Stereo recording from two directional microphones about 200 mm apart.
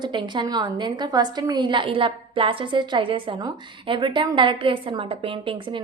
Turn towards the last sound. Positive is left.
turn(degrees=-25)  # may be behind; listen again after turning